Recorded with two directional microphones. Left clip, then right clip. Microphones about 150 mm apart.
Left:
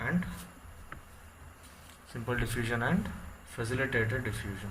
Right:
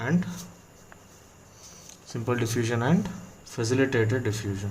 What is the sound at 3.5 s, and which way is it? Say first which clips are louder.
Speech: right 7 dB; 90° right.